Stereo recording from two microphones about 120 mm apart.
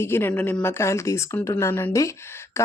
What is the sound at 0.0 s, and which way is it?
A woman's voice, 20° left (ahead or behind).